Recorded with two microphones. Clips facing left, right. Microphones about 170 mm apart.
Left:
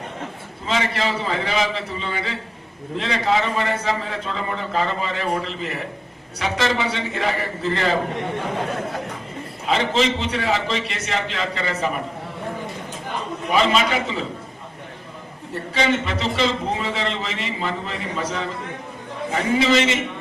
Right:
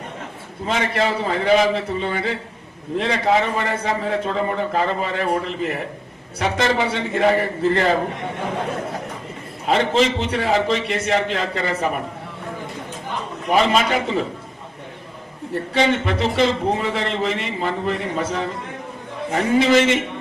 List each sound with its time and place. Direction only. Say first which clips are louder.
0.7 s a man's voice: right 2 dB; 50° right (ahead or behind)
9.6 s a man's voice: right 3 dB; 50° right (ahead or behind)
13.5 s a man's voice: right 2 dB; 50° right (ahead or behind)
15.7 s a man's voice: right 2 dB; 55° right (ahead or behind)
19.5 s a man's voice: right 4 dB; 50° right (ahead or behind)